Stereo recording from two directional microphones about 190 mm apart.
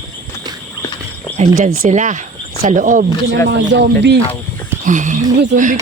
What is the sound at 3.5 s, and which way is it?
Speech, 65° right (ahead or behind).